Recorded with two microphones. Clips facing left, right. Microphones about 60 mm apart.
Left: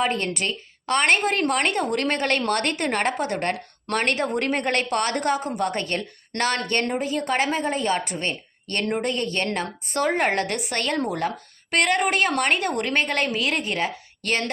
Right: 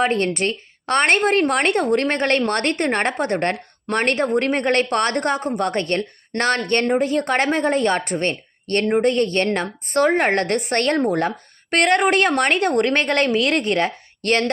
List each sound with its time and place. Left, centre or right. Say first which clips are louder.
0.0 s a woman's voice: right 5 dB; right